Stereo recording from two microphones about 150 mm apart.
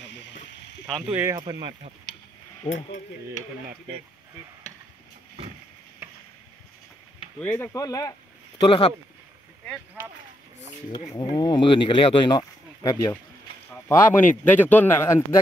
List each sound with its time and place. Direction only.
0.8 s speech: centre (ahead or behind)
1.1 s speech: 15° right (ahead or behind)
1.4 s speech: 30° right (ahead or behind)
2.6 s speech: 50° left (ahead or behind)
7.3 s speech: 10° left (ahead or behind)
8.6 s speech: 35° left (ahead or behind)
11.1 s speech: 25° left (ahead or behind)
13.8 s a man's voice: 15° left (ahead or behind)